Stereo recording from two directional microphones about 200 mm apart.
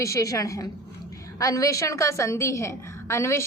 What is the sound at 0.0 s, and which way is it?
A woman's voice, 15° left (ahead or behind).